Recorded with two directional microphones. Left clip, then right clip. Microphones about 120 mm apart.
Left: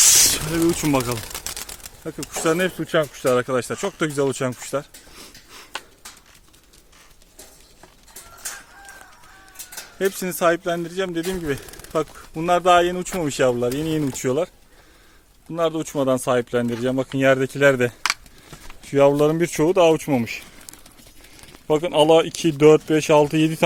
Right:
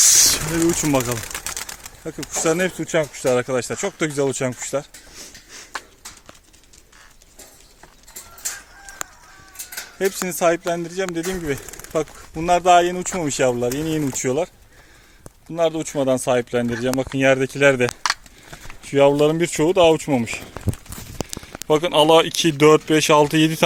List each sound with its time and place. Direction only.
0.0 s a sound: centre (ahead or behind)
0.8 s speech: centre (ahead or behind)
10.0 s speech: centre (ahead or behind)
15.5 s speech: 10° left (ahead or behind)
21.7 s speech: 5° left (ahead or behind)